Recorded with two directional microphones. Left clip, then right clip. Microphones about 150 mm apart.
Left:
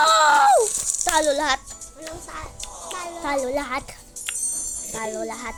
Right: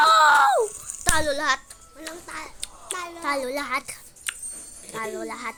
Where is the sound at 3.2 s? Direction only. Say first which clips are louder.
Left 3 dB; 5° right (ahead or behind).